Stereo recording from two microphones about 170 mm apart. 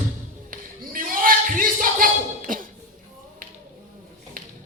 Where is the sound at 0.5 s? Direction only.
55° right (ahead or behind).